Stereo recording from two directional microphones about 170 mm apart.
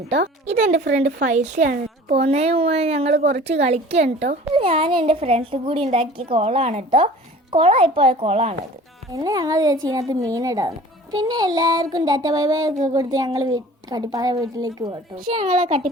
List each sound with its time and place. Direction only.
0.4 s a woman's voice: 45° right (ahead or behind)
2.1 s a woman's voice: 35° right (ahead or behind)
9.1 s speech: 20° right (ahead or behind)
15.3 s a woman's voice: 45° right (ahead or behind)